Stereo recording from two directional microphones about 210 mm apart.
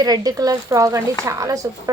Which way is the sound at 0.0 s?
20° right (ahead or behind).